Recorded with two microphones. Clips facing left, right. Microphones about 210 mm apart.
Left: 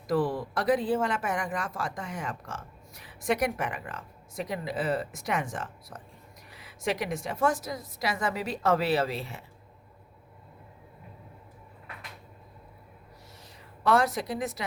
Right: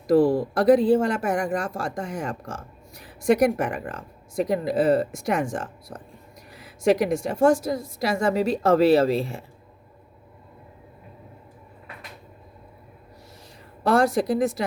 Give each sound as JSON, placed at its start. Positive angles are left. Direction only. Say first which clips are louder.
{"t": 0.1, "sound": "a woman's voice", "louder": "right 9 dB", "side_deg": -30}
{"t": 3.1, "sound": "a woman's voice", "louder": "right 9 dB", "side_deg": -45}
{"t": 5.1, "sound": "a woman's voice", "louder": "right 7 dB", "side_deg": -30}
{"t": 7.1, "sound": "a woman's voice", "louder": "right 9 dB", "side_deg": -30}
{"t": 13.8, "sound": "a woman's voice", "louder": "right 5 dB", "side_deg": -30}